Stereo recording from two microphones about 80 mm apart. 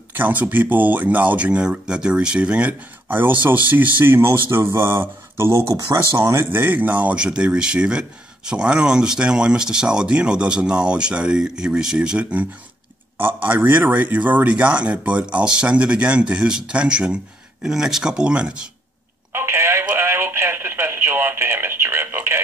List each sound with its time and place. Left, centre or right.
0.2 s speech: right
6.6 s speech: right
19.3 s telephone: right
20.0 s radio: right